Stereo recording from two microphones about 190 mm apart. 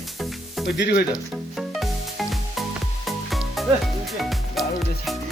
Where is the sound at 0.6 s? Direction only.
65° left (ahead or behind).